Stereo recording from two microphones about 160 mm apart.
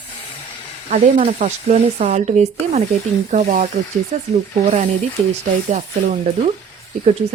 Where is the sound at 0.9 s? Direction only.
45° right (ahead or behind).